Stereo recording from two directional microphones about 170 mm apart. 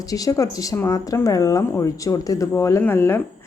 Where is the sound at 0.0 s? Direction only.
20° left (ahead or behind).